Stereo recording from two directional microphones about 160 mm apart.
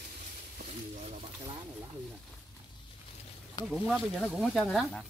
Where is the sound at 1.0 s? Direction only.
35° right (ahead or behind).